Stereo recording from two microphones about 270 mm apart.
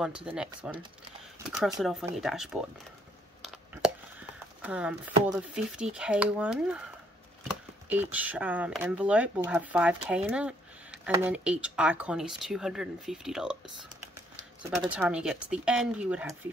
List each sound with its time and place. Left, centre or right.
0.0 s speech: centre
1.8 s speech: centre
3.7 s a sound: centre
5.3 s speech: centre
14.9 s speech: centre